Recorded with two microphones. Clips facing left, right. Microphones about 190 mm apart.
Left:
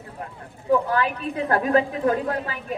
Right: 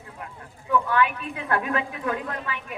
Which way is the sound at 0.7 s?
35° left (ahead or behind).